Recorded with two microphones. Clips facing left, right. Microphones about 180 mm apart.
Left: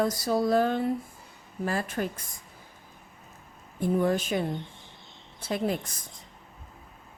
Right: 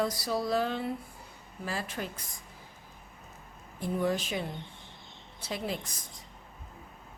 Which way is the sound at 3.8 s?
50° left (ahead or behind).